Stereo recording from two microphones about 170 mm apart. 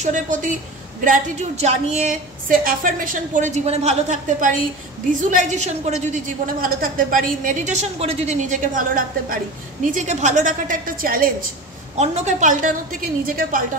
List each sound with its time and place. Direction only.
0.0 s a woman's voice: 50° right (ahead or behind)
12.0 s a woman's voice: 40° right (ahead or behind)